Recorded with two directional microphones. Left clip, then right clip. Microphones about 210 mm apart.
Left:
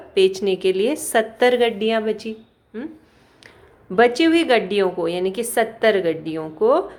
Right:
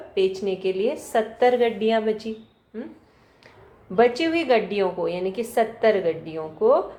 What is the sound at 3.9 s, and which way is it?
A woman's voice, 35° left (ahead or behind).